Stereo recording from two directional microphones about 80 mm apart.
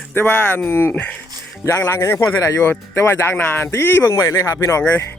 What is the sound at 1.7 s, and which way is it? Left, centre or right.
Speech, left.